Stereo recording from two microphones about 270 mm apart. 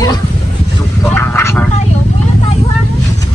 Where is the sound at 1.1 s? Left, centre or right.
Centre.